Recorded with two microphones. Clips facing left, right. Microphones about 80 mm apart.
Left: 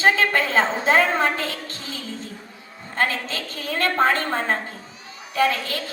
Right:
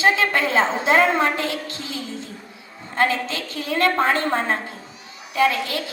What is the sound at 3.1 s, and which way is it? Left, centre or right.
A woman's voice, left.